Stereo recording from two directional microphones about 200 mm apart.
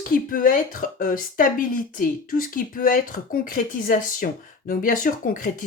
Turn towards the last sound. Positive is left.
turn(degrees=45)  # may be behind; listen again after turning